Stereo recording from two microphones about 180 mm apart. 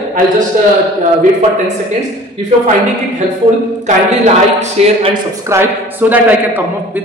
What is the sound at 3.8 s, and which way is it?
Speech, 40° right (ahead or behind).